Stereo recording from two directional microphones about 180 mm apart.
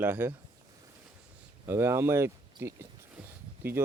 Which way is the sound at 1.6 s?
15° right (ahead or behind).